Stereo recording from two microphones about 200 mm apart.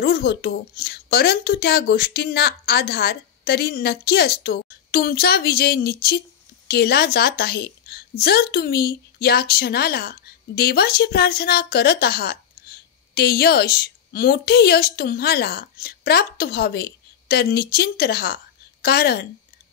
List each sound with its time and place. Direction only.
0.0 s speech: 50° left (ahead or behind)